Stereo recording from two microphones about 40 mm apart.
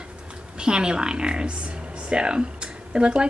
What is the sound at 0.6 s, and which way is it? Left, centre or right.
Speech, right.